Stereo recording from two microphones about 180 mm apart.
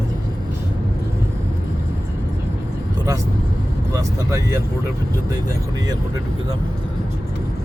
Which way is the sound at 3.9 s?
20° right (ahead or behind).